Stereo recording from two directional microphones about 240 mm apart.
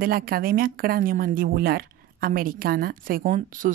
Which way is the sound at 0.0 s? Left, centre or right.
Right.